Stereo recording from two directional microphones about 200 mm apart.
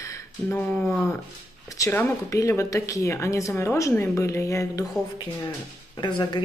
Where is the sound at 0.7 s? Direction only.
5° left (ahead or behind).